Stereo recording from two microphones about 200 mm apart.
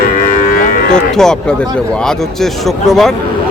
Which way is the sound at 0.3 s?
45° left (ahead or behind).